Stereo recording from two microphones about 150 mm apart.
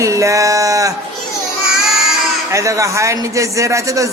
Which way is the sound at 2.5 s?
20° right (ahead or behind).